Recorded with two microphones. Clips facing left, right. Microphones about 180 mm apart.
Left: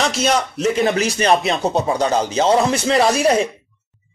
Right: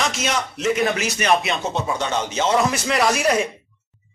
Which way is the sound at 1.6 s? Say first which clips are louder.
Left 6 dB; 35° left (ahead or behind).